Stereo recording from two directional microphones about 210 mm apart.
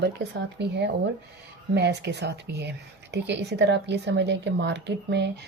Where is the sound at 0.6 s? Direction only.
55° right (ahead or behind).